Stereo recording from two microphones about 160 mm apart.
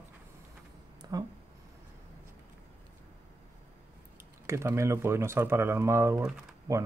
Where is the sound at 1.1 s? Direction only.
25° right (ahead or behind).